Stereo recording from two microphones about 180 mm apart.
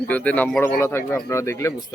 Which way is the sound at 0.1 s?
10° left (ahead or behind).